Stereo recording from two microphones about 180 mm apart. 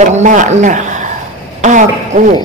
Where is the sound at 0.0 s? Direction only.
40° right (ahead or behind).